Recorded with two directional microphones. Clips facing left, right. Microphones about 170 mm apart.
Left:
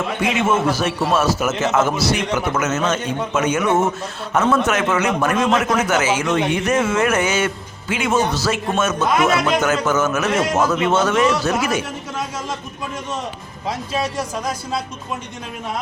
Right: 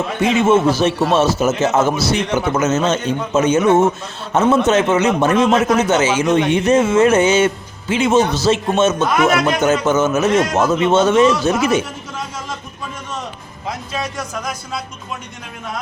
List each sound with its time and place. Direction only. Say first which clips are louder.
0.2 s speech: right 6 dB; 25° right (ahead or behind)
14.0 s speech: left 1 dB; 30° left (ahead or behind)